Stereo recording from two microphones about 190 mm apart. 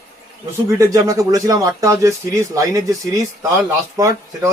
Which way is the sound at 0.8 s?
20° right (ahead or behind).